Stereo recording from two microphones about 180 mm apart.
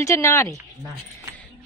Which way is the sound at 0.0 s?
15° left (ahead or behind).